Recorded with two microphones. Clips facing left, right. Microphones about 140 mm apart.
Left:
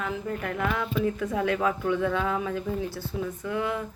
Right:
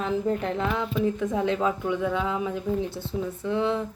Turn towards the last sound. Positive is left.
turn(degrees=-25)  # may be behind; listen again after turning